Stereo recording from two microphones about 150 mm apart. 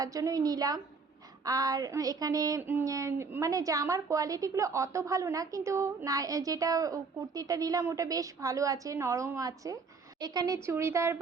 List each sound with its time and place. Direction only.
0.0 s speech: 25° right (ahead or behind)